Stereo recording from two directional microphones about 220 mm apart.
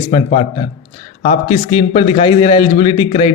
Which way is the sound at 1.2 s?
25° left (ahead or behind).